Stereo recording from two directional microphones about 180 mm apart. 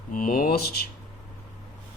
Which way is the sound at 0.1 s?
50° left (ahead or behind).